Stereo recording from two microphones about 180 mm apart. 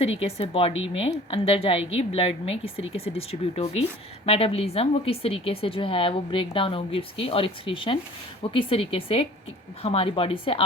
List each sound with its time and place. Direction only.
0.0 s a woman's voice: 35° left (ahead or behind)